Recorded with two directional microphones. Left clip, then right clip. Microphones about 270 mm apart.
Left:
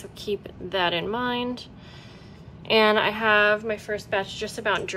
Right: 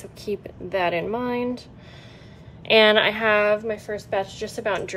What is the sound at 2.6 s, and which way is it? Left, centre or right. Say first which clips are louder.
Speech: right 4 dB; centre.